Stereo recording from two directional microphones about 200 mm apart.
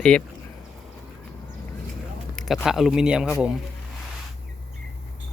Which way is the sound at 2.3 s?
Centre (ahead or behind).